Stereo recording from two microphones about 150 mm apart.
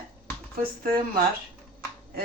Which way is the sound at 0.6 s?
80° right.